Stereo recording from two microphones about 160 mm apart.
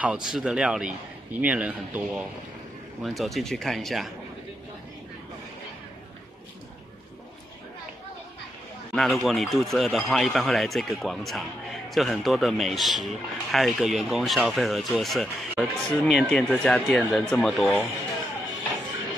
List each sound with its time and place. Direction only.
0.0 s a man's voice: 5° right (ahead or behind)
8.9 s speech: centre (ahead or behind)